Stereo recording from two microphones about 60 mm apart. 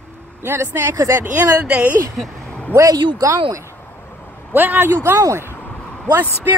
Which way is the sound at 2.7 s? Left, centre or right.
Right.